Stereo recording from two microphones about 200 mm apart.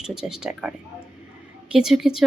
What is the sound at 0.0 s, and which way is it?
Speech, centre (ahead or behind).